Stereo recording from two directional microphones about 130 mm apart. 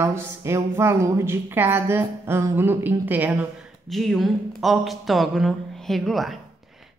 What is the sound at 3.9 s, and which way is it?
Speech, centre (ahead or behind).